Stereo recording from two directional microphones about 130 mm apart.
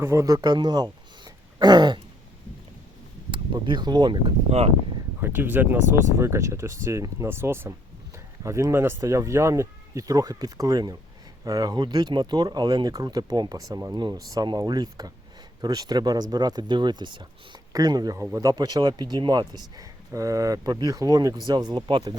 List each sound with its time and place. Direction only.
0.0 s speech: 20° right (ahead or behind)
3.3 s speech: 35° right (ahead or behind)
5.2 s speech: 15° right (ahead or behind); by 22.1 s 35° right (ahead or behind)